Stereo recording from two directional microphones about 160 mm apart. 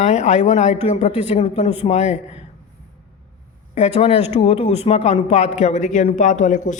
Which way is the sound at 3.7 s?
40° left (ahead or behind).